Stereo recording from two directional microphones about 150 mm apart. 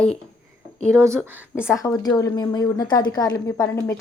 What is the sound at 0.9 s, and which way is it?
Speech, 20° right (ahead or behind).